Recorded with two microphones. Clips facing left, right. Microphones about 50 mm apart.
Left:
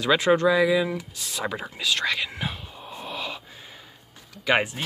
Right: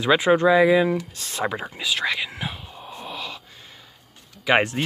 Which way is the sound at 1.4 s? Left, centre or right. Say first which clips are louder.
Right 3 dB; centre.